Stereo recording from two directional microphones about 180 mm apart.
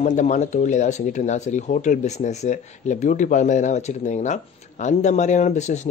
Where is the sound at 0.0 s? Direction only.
40° left (ahead or behind).